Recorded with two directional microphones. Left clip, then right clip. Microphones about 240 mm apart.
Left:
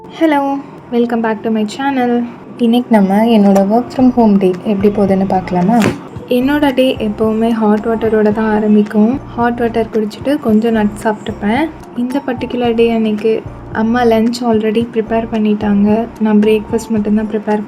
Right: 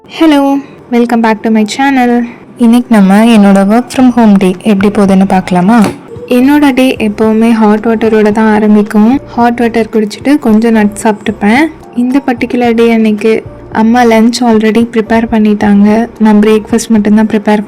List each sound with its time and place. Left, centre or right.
0.2 s a woman's voice: right
2.6 s a woman's voice: right
6.2 s a woman's voice: right